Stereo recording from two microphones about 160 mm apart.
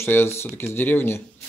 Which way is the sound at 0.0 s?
15° left (ahead or behind).